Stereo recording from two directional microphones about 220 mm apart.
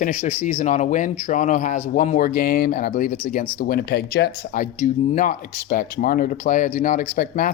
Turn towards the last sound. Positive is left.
turn(degrees=40)  # may be behind; listen again after turning